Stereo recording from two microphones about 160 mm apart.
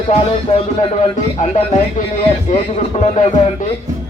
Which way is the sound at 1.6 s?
55° left (ahead or behind).